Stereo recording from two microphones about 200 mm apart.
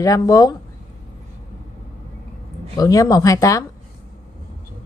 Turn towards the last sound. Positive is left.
turn(degrees=15)  # may be behind; listen again after turning